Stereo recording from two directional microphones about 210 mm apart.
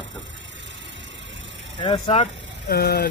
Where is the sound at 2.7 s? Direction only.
50° left (ahead or behind).